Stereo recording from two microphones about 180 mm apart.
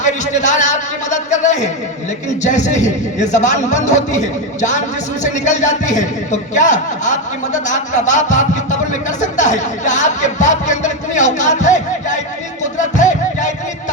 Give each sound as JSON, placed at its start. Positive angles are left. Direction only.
{"t": 0.0, "sound": "a man's voice", "side_deg": 40}
{"t": 13.0, "sound": "music", "side_deg": 45}